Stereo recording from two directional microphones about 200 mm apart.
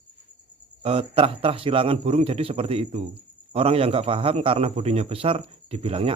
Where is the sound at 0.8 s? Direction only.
30° right (ahead or behind).